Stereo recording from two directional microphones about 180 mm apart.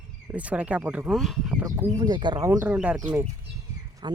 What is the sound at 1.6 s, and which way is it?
Speech, 20° right (ahead or behind).